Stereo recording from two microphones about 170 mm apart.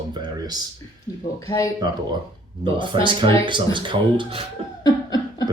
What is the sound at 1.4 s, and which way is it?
Speech, 20° left (ahead or behind).